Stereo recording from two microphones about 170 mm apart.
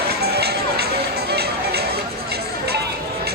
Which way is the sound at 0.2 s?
70° right (ahead or behind).